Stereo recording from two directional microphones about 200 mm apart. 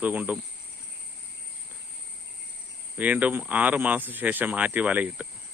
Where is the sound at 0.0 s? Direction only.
10° right (ahead or behind).